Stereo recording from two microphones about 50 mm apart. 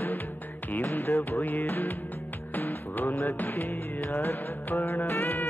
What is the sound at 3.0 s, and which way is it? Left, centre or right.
Music, left.